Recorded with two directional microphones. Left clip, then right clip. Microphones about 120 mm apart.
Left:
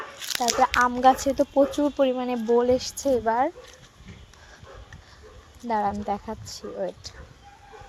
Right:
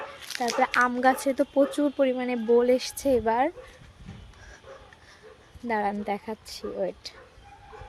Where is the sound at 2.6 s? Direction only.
10° right (ahead or behind).